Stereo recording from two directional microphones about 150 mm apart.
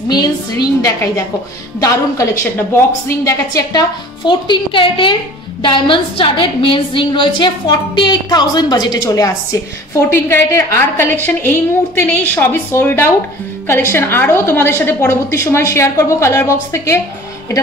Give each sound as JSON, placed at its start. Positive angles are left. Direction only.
{"t": 0.1, "sound": "a woman's voice", "side_deg": 25}